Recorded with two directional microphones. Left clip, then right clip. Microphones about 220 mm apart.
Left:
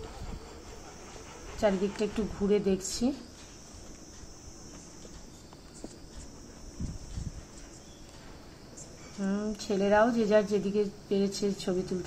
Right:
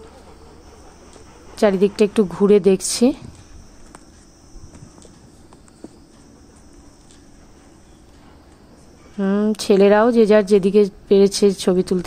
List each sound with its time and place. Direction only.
1.6 s a woman's voice: 45° right (ahead or behind)
9.2 s speech: 40° right (ahead or behind)